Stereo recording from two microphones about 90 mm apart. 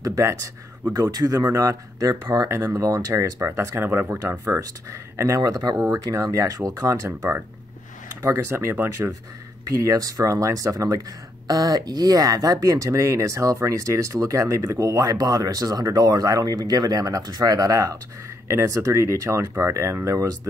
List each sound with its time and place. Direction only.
0.0 s speech: 35° right (ahead or behind)
3.9 s speech: 20° right (ahead or behind)
4.2 s speech: 35° right (ahead or behind)